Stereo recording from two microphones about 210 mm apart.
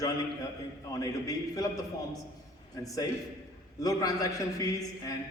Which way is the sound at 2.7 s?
15° left (ahead or behind).